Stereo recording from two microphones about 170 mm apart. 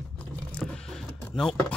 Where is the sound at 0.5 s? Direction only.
5° left (ahead or behind).